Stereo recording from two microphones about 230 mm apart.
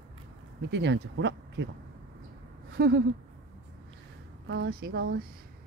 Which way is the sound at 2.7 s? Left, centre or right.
Right.